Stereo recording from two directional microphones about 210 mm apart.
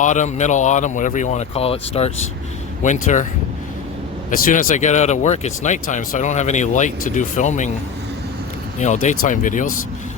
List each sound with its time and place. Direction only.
0.0 s speech: 35° left (ahead or behind)
4.3 s speech: 40° left (ahead or behind)
8.8 s speech: 35° left (ahead or behind)